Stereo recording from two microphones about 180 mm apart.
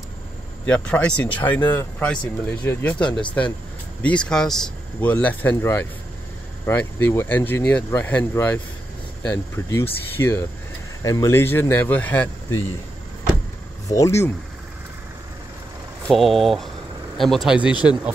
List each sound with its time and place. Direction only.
0.7 s speech: 10° left (ahead or behind)
13.8 s speech: 15° left (ahead or behind)
16.1 s speech: centre (ahead or behind)